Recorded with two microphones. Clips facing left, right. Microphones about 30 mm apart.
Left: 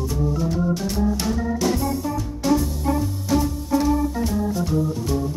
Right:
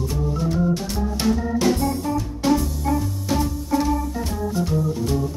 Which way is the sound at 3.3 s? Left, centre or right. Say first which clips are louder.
Left 1 dB; centre.